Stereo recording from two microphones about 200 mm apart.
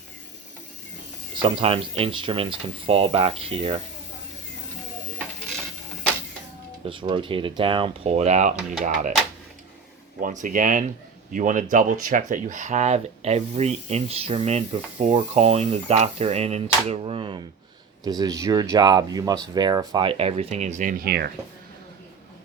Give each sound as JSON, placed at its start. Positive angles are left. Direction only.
{"t": 1.4, "sound": "speech", "side_deg": -25}
{"t": 6.8, "sound": "speech", "side_deg": -25}
{"t": 10.2, "sound": "speech", "side_deg": -40}